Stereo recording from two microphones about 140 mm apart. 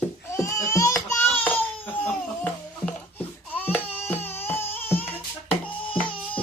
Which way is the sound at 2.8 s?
10° left (ahead or behind).